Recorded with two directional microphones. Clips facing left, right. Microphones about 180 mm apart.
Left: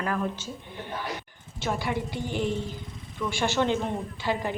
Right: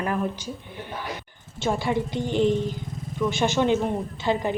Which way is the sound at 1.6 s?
25° right (ahead or behind).